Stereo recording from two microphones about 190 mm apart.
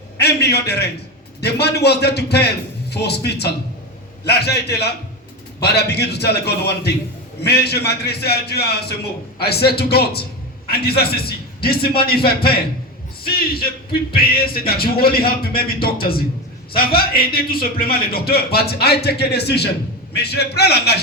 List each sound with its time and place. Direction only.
0.2 s a man's voice: 60° left (ahead or behind)